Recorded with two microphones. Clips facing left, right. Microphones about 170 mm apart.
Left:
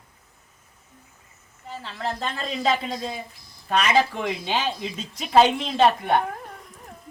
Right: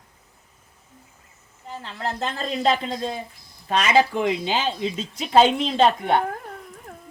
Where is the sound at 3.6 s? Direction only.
35° right (ahead or behind).